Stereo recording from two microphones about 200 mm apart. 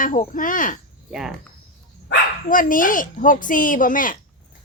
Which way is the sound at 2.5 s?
40° left (ahead or behind).